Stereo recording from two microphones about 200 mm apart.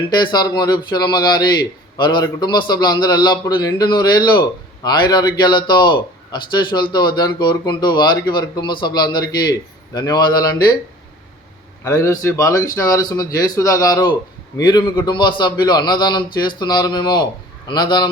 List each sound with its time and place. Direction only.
0.1 s a man's voice: 20° left (ahead or behind)
11.8 s a man's voice: 15° left (ahead or behind)